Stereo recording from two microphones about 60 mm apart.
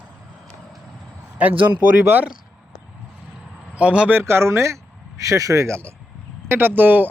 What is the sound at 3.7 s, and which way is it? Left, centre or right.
Speech, right.